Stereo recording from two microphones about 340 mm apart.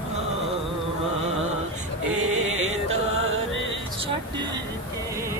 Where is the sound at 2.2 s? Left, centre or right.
Right.